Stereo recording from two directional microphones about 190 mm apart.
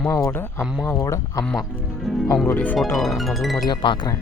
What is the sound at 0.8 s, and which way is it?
Speech, 15° left (ahead or behind).